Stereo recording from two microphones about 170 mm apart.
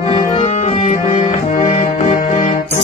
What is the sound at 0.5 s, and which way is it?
Music, 45° left (ahead or behind).